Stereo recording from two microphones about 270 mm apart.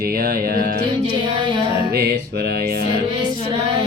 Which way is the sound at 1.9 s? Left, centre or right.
Right.